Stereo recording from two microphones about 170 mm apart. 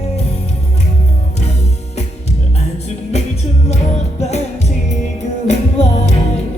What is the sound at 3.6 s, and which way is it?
Music, 40° left (ahead or behind).